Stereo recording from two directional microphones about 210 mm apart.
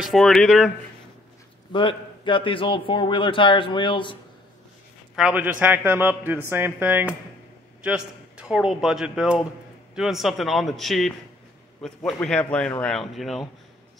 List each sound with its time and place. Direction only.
0.0 s a man's voice: centre (ahead or behind)
1.7 s speech: 25° left (ahead or behind)
5.1 s a man's voice: 5° right (ahead or behind)